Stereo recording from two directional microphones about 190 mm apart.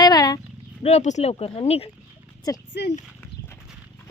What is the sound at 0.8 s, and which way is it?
Speech, 35° left (ahead or behind).